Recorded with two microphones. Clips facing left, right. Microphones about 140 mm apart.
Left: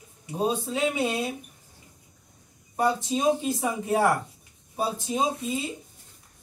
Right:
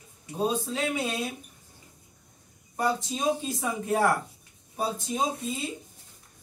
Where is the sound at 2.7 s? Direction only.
20° left (ahead or behind).